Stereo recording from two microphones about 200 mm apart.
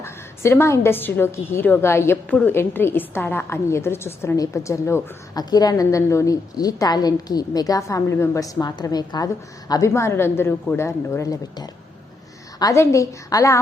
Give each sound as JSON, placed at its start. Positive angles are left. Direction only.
{"t": 0.0, "sound": "a woman's voice", "side_deg": 10}